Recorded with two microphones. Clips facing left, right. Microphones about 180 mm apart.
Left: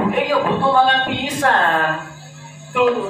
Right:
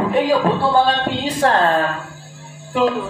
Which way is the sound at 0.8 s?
30° right (ahead or behind).